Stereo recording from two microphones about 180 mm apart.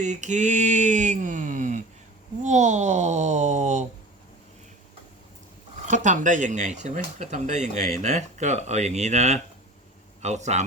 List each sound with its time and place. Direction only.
0.0 s a sound: 40° right (ahead or behind)
2.4 s speech: 40° right (ahead or behind)
5.9 s a man's voice: 45° right (ahead or behind)